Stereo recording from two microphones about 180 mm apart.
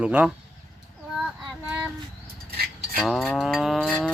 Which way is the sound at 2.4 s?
60° right (ahead or behind).